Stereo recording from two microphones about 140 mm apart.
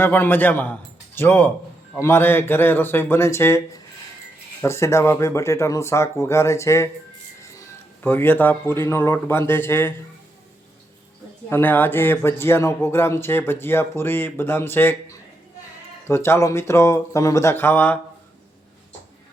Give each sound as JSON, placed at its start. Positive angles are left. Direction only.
{"t": 0.0, "sound": "a man's voice", "side_deg": 15}
{"t": 4.6, "sound": "a man's voice", "side_deg": 20}
{"t": 11.4, "sound": "speech", "side_deg": 15}